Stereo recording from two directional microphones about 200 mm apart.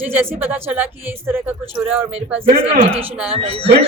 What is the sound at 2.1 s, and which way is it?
Speech, 35° right (ahead or behind).